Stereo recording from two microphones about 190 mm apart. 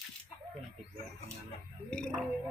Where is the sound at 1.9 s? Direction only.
5° left (ahead or behind).